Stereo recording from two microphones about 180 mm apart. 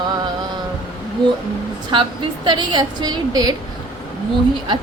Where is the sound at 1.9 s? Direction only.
25° right (ahead or behind).